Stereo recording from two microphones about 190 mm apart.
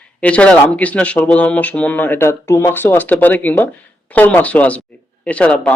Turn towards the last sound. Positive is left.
turn(degrees=5)  # may be behind; listen again after turning